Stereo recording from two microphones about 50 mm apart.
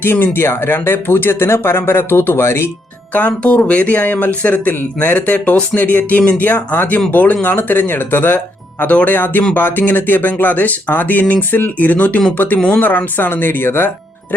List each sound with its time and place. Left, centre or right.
0.0 s speech: left
3.1 s speech: left
3.4 s speech: left
8.8 s speech: left
13.1 s speech: left